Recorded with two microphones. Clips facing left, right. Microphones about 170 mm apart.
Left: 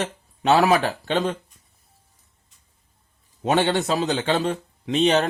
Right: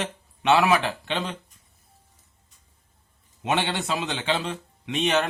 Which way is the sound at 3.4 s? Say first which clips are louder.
Left 6 dB; 40° left (ahead or behind).